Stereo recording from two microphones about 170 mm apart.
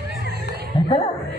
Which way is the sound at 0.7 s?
30° left (ahead or behind).